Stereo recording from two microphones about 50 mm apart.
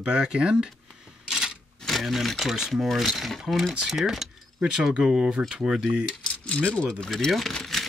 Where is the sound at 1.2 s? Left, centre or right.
Centre.